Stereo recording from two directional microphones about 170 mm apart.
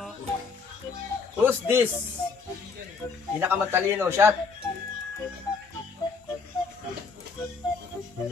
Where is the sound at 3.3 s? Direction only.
15° right (ahead or behind).